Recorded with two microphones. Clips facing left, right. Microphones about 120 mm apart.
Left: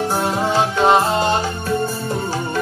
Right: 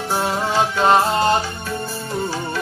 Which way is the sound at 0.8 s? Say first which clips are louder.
Left 1 dB; centre (ahead or behind).